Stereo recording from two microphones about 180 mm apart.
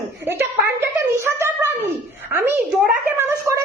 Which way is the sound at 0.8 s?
15° right (ahead or behind).